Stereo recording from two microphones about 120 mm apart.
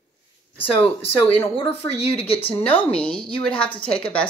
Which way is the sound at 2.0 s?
55° left (ahead or behind).